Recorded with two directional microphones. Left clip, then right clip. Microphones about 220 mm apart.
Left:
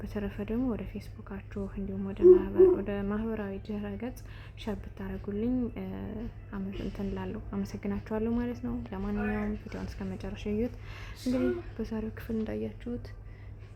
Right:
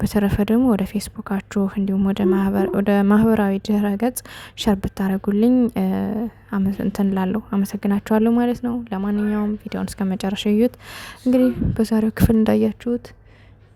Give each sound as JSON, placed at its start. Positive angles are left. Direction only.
{"t": 0.0, "sound": "a woman's voice", "side_deg": -50}